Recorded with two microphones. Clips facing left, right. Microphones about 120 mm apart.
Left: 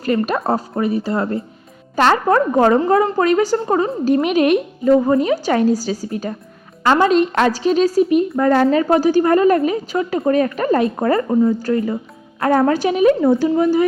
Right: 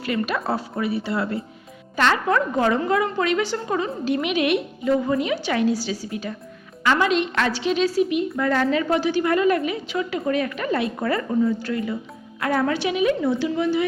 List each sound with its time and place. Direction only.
0.0 s a woman's voice: 40° left (ahead or behind)